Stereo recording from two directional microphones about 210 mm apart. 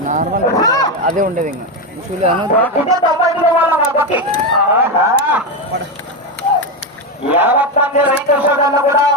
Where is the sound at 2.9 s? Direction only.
20° right (ahead or behind).